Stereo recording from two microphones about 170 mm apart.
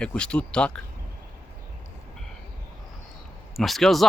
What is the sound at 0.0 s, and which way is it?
Speech, 5° left (ahead or behind).